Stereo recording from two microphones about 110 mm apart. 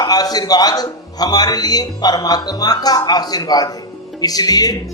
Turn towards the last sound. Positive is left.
turn(degrees=35)  # may be behind; listen again after turning